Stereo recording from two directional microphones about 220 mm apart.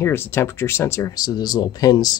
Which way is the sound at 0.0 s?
10° left (ahead or behind).